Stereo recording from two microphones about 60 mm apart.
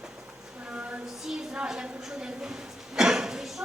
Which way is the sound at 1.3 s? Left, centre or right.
Centre.